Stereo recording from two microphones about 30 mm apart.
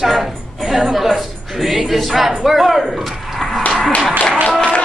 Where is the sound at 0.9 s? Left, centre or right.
Centre.